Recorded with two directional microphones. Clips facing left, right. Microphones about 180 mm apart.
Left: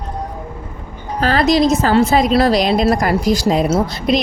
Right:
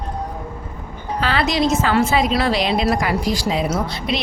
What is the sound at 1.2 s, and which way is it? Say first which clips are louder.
A woman's voice: left 6 dB; 40° left (ahead or behind).